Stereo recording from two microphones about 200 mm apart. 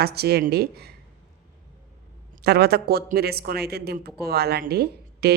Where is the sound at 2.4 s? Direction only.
50° right (ahead or behind).